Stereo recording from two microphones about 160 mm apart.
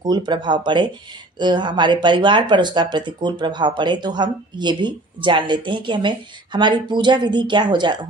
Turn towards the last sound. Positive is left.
turn(degrees=-30)  # may be behind; listen again after turning